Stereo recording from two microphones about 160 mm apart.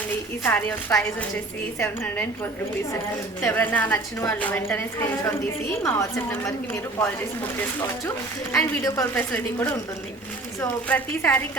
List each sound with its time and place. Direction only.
0.4 s a woman's voice: 10° left (ahead or behind)
8.8 s a woman's voice: 15° left (ahead or behind)